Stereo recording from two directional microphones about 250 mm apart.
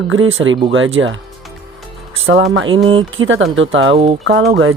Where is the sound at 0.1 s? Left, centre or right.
Right.